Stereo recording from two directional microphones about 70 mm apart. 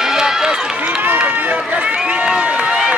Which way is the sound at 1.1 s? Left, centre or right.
Right.